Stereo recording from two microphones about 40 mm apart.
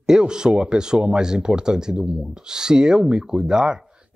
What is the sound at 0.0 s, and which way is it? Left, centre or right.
Speech, centre.